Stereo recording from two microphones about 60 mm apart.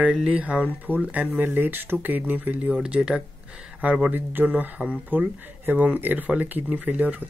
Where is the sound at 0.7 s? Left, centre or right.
Left.